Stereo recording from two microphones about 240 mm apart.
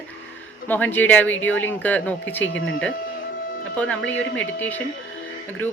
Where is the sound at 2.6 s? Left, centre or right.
Left.